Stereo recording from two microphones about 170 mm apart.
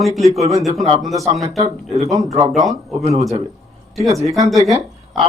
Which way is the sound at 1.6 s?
40° right (ahead or behind).